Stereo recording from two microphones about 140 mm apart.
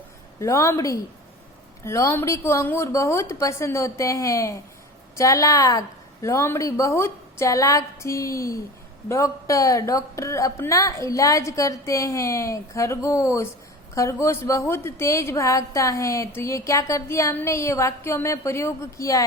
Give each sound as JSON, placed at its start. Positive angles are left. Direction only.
{"t": 0.3, "sound": "a woman's voice", "side_deg": 20}